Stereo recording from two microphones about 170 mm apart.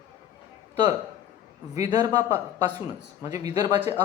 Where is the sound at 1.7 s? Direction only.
20° right (ahead or behind).